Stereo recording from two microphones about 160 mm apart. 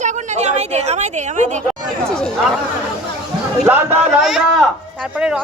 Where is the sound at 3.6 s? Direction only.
15° right (ahead or behind).